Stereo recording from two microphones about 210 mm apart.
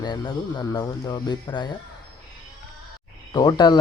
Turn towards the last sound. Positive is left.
turn(degrees=20)  # may be behind; listen again after turning